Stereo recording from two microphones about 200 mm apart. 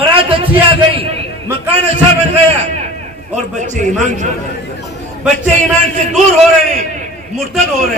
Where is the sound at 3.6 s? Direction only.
35° right (ahead or behind).